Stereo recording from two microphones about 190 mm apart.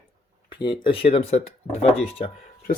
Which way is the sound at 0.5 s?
25° left (ahead or behind).